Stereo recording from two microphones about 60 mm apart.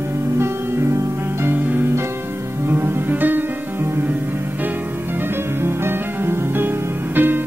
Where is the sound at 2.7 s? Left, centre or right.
Right.